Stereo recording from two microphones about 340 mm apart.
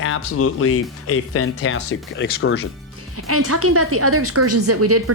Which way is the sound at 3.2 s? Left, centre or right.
Right.